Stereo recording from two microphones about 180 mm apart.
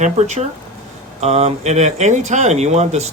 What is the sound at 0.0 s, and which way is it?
Speech, 40° right (ahead or behind).